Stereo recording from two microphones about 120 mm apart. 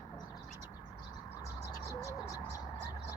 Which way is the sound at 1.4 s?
25° left (ahead or behind).